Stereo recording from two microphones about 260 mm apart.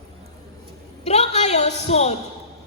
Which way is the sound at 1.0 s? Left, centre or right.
Left.